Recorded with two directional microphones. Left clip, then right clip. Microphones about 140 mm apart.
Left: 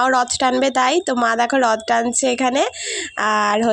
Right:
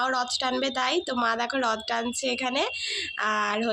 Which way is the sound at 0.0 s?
60° left (ahead or behind).